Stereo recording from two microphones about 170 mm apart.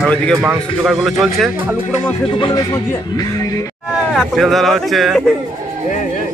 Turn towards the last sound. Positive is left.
turn(degrees=0)  # may be behind; listen again after turning